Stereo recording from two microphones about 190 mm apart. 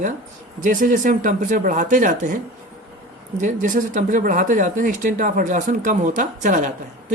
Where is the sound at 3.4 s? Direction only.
45° right (ahead or behind).